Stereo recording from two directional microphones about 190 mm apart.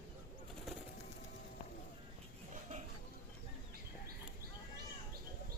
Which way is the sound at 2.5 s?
35° right (ahead or behind).